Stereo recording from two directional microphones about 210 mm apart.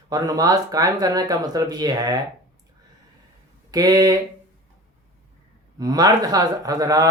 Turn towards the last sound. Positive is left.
turn(degrees=-15)  # may be behind; listen again after turning